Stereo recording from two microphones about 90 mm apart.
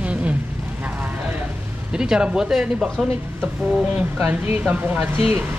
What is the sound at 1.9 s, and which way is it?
Speech, 10° right (ahead or behind).